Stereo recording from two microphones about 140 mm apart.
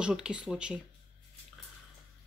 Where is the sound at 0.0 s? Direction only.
5° right (ahead or behind).